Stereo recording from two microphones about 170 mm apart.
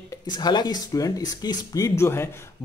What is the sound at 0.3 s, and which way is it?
Speech, 25° left (ahead or behind).